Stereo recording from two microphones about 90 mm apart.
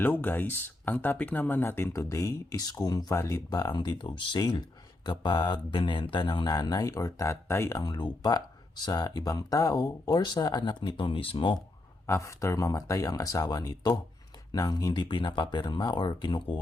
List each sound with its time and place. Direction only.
0.0 s speech: 20° left (ahead or behind); by 3.9 s 50° left (ahead or behind)
4.0 s speech: 65° left (ahead or behind); by 7.8 s 30° left (ahead or behind)
7.8 s speech: 50° left (ahead or behind); by 11.5 s 75° left (ahead or behind)
12.0 s speech: 35° left (ahead or behind); by 16.6 s 60° left (ahead or behind)